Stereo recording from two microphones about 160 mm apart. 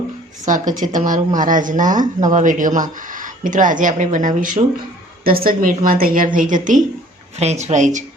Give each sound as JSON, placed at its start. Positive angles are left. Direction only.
{"t": 0.4, "sound": "a woman's voice", "side_deg": -50}
{"t": 7.3, "sound": "speech", "side_deg": -45}